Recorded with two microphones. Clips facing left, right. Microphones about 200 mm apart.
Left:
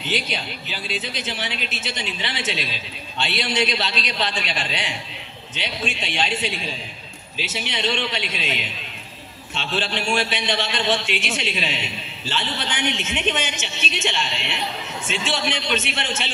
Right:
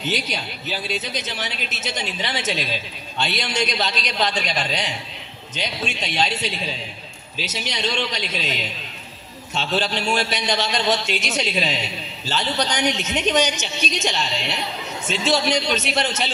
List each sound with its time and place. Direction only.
0.0 s a man's voice: 45° right (ahead or behind)